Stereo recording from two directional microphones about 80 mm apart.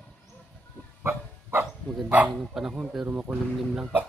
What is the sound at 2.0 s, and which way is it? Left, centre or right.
Bow-wow, centre.